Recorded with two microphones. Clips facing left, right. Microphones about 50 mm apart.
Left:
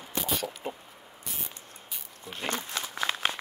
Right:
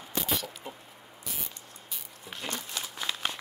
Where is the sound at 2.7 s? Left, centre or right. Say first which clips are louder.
Left 4 dB; left.